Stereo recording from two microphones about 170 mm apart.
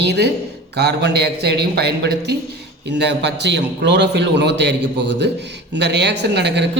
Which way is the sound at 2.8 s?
90° right.